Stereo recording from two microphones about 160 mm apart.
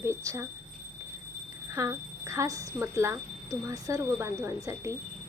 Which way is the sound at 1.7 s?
20° right (ahead or behind).